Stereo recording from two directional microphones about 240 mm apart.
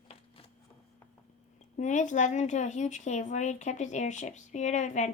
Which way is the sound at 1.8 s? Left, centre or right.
Left.